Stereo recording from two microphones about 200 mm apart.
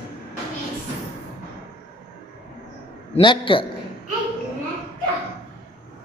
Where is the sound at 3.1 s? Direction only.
25° left (ahead or behind).